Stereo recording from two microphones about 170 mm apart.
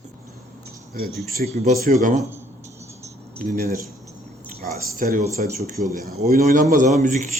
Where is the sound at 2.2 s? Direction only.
15° right (ahead or behind).